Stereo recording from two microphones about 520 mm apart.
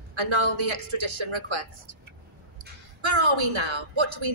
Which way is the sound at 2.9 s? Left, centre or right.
Right.